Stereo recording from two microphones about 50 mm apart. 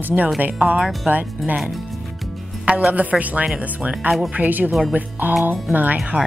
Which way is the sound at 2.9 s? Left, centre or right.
Right.